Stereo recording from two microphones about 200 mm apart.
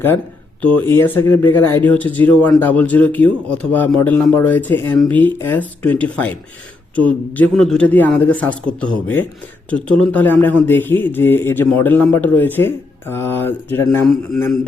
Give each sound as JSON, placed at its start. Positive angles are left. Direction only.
{"t": 0.9, "sound": "speech", "side_deg": 10}